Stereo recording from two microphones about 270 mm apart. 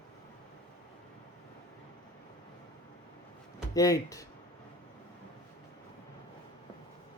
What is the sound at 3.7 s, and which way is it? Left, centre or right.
Speech, centre.